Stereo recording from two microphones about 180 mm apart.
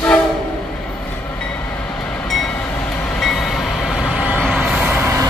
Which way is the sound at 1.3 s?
5° left (ahead or behind).